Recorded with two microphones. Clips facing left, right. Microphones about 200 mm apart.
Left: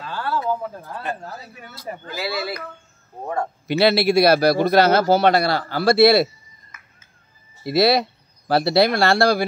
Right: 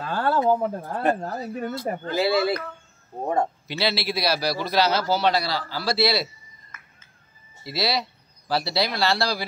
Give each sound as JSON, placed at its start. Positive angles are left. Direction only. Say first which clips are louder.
{"t": 0.0, "sound": "a sound", "louder": "right 2 dB", "side_deg": -50}
{"t": 0.5, "sound": "speech", "louder": "right 4 dB", "side_deg": -55}
{"t": 1.2, "sound": "a man's voice", "louder": "right 8 dB", "side_deg": -45}
{"t": 2.0, "sound": "speech", "louder": "right 6 dB", "side_deg": -25}
{"t": 3.6, "sound": "a man's voice", "louder": "left 9 dB", "side_deg": 55}
{"t": 7.6, "sound": "speech", "louder": "left 9 dB", "side_deg": 55}